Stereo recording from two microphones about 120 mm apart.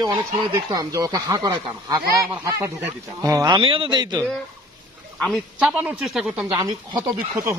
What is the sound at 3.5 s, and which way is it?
Speech, 45° right (ahead or behind).